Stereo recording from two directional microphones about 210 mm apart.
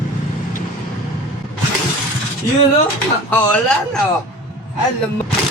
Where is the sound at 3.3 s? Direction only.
5° left (ahead or behind).